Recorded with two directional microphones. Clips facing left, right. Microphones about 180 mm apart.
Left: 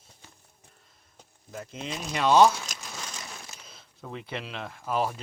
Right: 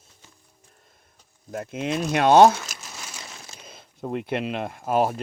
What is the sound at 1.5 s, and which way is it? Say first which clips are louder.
Speech: right 9 dB; 60° right (ahead or behind).